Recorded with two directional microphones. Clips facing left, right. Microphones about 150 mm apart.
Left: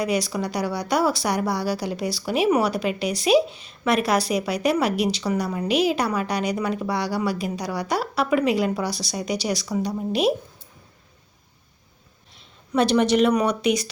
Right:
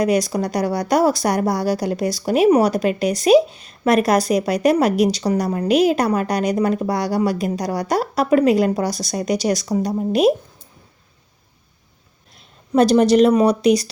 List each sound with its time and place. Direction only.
0.0 s speech: 45° right (ahead or behind)
12.7 s speech: 40° right (ahead or behind)